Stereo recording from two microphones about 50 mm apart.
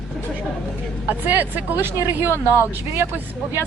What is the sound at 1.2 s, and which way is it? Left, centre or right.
Speech, right.